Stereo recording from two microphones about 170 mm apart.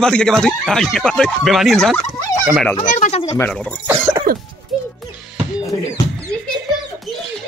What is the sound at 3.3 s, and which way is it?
Speech, 15° left (ahead or behind).